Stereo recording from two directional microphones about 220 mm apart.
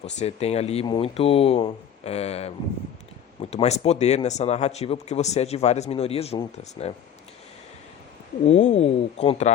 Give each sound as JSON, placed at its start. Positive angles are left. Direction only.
{"t": 0.0, "sound": "speech", "side_deg": 30}
{"t": 3.5, "sound": "speech", "side_deg": 30}
{"t": 8.4, "sound": "speech", "side_deg": 30}